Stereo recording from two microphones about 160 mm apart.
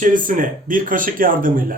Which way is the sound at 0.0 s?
55° right (ahead or behind).